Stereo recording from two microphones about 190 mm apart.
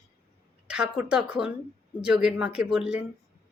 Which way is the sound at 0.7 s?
5° right (ahead or behind).